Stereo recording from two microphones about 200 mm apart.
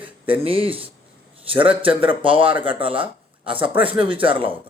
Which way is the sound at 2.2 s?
25° right (ahead or behind).